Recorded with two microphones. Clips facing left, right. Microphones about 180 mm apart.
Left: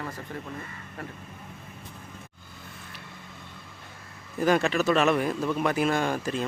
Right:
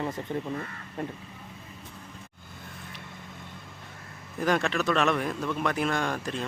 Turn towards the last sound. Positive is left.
turn(degrees=5)  # may be behind; listen again after turning